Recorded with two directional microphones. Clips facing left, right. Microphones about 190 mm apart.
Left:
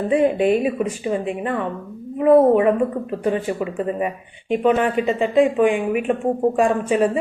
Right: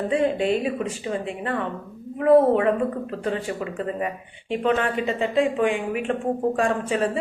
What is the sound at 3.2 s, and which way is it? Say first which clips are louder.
A woman's voice: left 6 dB; 15° left (ahead or behind).